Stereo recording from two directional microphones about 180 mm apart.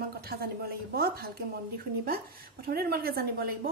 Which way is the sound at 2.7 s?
60° right (ahead or behind).